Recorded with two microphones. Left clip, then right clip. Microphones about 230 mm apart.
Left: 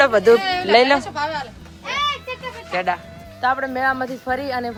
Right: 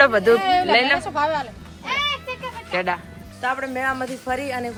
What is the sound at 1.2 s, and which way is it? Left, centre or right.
Speech, centre.